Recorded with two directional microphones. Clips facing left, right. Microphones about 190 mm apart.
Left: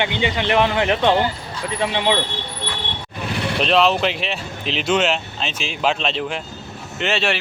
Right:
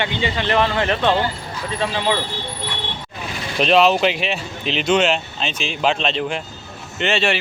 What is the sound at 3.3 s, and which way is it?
Vehicle, 70° left (ahead or behind).